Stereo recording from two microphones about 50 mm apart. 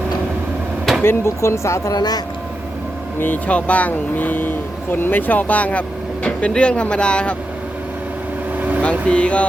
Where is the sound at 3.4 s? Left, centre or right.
Left.